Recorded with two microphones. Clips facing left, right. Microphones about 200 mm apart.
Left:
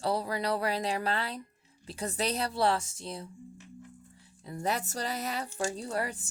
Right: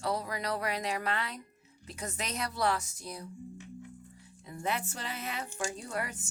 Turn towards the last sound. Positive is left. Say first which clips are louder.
# left 4 dB
turn(degrees=35)  # may be behind; listen again after turning